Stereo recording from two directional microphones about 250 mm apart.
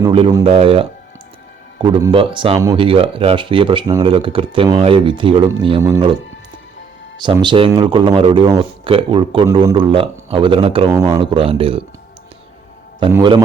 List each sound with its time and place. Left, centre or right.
0.0 s speech: centre
7.2 s speech: centre
13.0 s speech: centre